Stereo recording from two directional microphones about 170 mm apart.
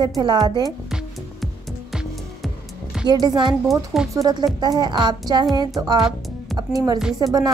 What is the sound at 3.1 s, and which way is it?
Speech, 25° right (ahead or behind).